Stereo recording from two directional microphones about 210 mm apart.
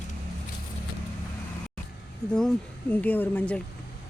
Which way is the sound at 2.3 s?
5° left (ahead or behind).